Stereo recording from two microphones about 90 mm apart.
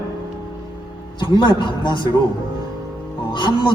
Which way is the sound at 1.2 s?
60° left (ahead or behind).